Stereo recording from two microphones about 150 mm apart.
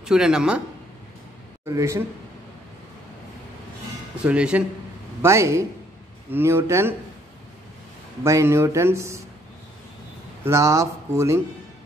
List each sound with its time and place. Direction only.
0.0 s speech: 5° right (ahead or behind)
1.7 s speech: 20° right (ahead or behind)
4.2 s speech: 5° right (ahead or behind)
5.2 s speech: 20° right (ahead or behind)
8.2 s speech: 20° right (ahead or behind)
10.4 s speech: 20° right (ahead or behind)